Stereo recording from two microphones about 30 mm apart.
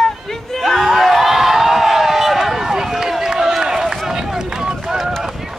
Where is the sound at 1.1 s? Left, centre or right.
Centre.